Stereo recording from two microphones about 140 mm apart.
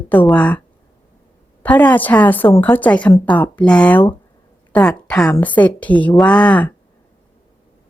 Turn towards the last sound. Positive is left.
turn(degrees=10)  # may be behind; listen again after turning